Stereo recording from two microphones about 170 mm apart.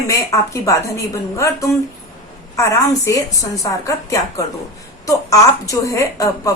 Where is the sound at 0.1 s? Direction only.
20° left (ahead or behind).